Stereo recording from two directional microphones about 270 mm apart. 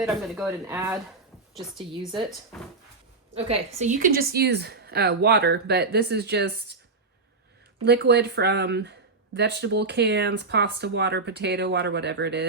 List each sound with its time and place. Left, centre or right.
0.0 s speech: centre
2.5 s speech: centre
3.3 s speech: right
7.9 s speech: right